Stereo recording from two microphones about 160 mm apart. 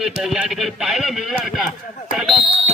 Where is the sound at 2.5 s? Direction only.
40° right (ahead or behind).